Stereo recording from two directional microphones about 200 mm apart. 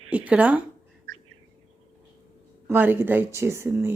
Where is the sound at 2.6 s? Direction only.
10° right (ahead or behind).